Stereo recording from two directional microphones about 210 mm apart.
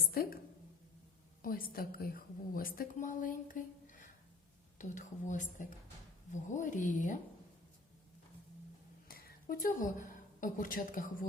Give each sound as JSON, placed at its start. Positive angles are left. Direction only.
{"t": 0.1, "sound": "a woman's voice", "side_deg": 45}
{"t": 1.4, "sound": "a woman's voice", "side_deg": 45}
{"t": 9.0, "sound": "a woman's voice", "side_deg": 45}